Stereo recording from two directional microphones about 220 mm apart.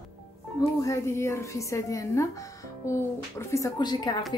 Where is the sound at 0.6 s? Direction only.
15° left (ahead or behind).